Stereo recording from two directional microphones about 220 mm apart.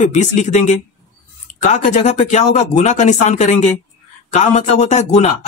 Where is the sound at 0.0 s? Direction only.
30° left (ahead or behind).